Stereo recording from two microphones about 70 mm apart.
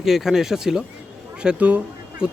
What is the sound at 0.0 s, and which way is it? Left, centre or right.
A man's voice, centre.